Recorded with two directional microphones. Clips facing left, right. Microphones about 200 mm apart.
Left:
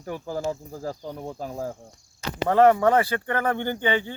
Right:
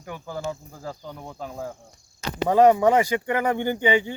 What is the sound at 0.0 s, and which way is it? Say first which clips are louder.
Speech: left 3 dB; 35° left (ahead or behind).